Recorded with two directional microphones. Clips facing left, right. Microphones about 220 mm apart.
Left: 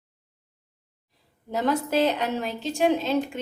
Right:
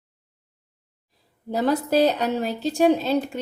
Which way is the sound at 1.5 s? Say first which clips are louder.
Right 3 dB; 35° right (ahead or behind).